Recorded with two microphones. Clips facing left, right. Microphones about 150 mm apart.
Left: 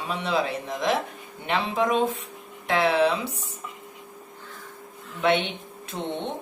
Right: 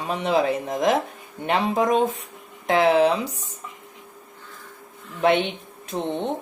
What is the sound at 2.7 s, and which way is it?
Speech, 20° right (ahead or behind).